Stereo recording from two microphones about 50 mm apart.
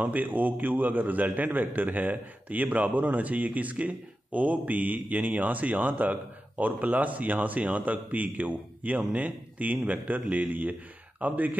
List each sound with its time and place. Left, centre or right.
0.0 s a man's voice: right